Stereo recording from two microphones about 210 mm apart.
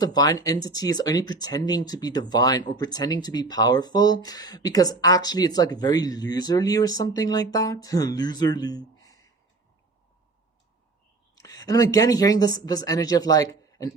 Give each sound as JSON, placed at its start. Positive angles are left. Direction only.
{"t": 0.0, "sound": "speech", "side_deg": 20}
{"t": 11.3, "sound": "speech", "side_deg": 15}